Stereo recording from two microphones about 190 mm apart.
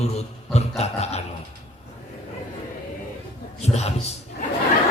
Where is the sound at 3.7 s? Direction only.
35° left (ahead or behind).